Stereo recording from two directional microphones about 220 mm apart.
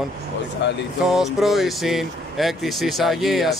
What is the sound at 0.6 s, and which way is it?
Speech, 50° left (ahead or behind).